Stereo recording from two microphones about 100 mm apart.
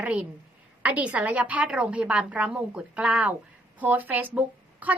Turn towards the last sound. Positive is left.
turn(degrees=-15)  # may be behind; listen again after turning